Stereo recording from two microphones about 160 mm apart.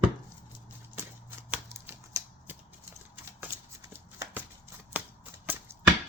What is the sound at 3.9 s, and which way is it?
Shuffling cards, 15° right (ahead or behind).